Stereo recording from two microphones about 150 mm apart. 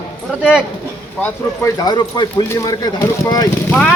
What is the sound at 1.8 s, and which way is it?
Speech, 25° left (ahead or behind).